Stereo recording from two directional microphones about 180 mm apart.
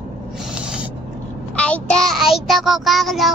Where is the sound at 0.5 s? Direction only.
5° right (ahead or behind).